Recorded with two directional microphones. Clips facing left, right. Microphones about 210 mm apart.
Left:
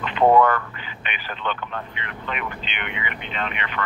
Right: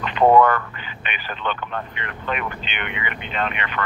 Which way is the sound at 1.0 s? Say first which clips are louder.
Right 1 dB; 50° right (ahead or behind).